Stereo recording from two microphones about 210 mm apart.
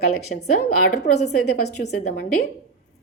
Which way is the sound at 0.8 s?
50° left (ahead or behind).